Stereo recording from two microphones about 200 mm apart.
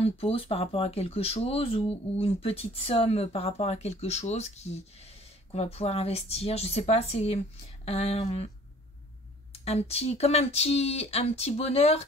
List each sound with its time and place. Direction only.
0.0 s speech: 30° left (ahead or behind)
9.5 s speech: 30° left (ahead or behind)